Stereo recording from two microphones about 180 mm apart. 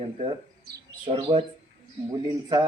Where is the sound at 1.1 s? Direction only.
30° right (ahead or behind).